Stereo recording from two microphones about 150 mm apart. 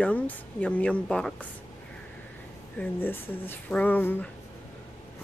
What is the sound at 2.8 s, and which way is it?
Speech, 15° left (ahead or behind).